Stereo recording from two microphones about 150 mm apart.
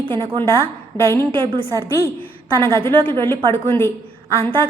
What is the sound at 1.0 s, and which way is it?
Speech, 15° left (ahead or behind).